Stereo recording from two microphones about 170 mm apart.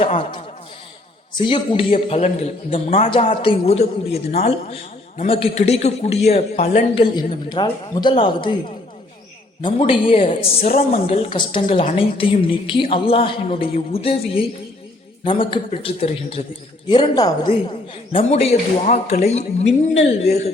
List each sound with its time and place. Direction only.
0.0 s a man's voice: 35° left (ahead or behind)
1.4 s a man's voice: 30° left (ahead or behind)
9.6 s a man's voice: 30° left (ahead or behind)
10.6 s a woman's voice: 60° left (ahead or behind)
11.0 s a woman's voice: 30° left (ahead or behind)
11.6 s a man's voice: 40° left (ahead or behind)